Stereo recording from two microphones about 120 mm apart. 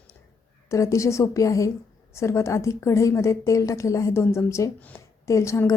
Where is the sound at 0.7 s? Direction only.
25° left (ahead or behind).